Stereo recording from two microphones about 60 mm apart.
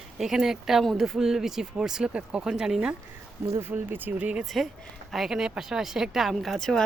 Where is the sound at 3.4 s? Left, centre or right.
Right.